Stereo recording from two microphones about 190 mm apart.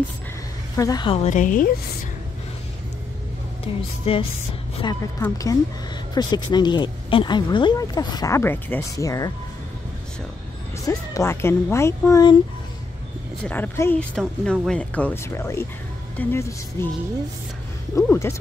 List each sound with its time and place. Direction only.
0.7 s a woman's voice: 20° left (ahead or behind); by 1.7 s 45° left (ahead or behind)
3.6 s a woman's voice: 30° left (ahead or behind)
10.9 s speech: 15° left (ahead or behind)
13.4 s speech: 10° left (ahead or behind)
17.9 s speech: 15° left (ahead or behind)